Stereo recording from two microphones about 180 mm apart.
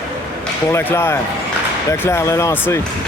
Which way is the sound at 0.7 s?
15° left (ahead or behind).